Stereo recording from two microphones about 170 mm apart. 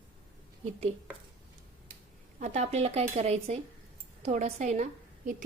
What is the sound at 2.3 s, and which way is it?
A woman's voice, 40° right (ahead or behind).